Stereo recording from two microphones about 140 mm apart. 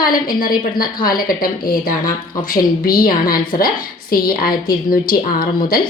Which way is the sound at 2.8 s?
90° left.